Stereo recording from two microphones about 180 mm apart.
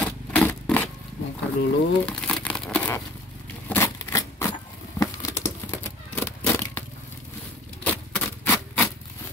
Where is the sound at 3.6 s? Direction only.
15° left (ahead or behind).